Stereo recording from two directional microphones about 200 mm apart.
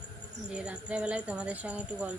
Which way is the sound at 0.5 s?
5° right (ahead or behind).